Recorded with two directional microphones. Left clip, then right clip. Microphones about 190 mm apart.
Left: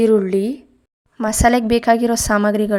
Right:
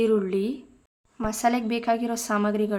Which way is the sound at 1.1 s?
40° left (ahead or behind).